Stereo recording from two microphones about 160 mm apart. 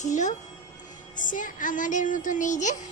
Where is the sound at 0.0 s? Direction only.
50° left (ahead or behind).